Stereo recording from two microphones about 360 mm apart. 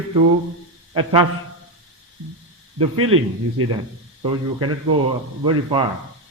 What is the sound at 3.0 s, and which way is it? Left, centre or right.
Speech, right.